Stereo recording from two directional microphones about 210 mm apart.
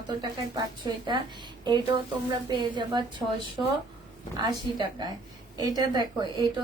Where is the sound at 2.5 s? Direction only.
20° right (ahead or behind).